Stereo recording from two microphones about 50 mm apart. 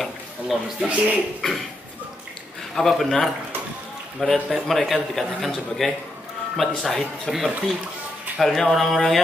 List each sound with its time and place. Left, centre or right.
0.7 s speech: right
2.7 s speech: centre